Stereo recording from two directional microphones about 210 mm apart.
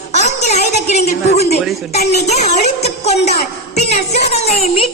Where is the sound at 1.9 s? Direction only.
30° left (ahead or behind).